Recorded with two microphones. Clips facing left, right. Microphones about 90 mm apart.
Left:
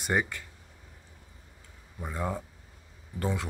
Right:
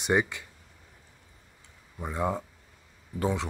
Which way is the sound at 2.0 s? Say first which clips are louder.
Right 4 dB; 15° right (ahead or behind).